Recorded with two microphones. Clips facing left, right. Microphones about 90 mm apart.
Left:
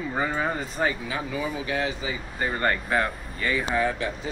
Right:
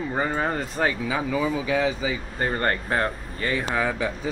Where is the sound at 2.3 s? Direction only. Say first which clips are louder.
Left 1 dB; 45° right (ahead or behind).